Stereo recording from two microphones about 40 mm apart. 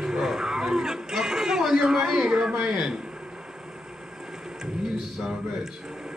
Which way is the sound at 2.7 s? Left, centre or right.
Centre.